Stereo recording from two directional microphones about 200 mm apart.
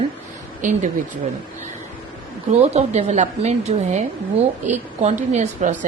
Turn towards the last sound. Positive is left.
turn(degrees=-35)  # may be behind; listen again after turning